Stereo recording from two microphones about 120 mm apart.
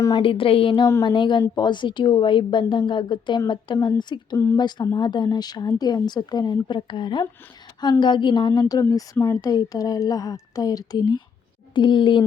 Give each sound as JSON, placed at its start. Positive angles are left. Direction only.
{"t": 0.2, "sound": "a sound", "side_deg": 45}
{"t": 1.0, "sound": "a woman's voice", "side_deg": 40}
{"t": 9.1, "sound": "a woman's voice", "side_deg": 25}